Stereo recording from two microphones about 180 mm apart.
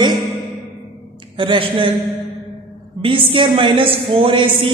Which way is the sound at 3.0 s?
30° right (ahead or behind).